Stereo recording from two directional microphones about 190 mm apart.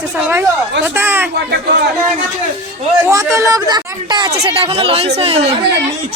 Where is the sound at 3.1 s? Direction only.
15° right (ahead or behind); by 5.4 s 30° right (ahead or behind).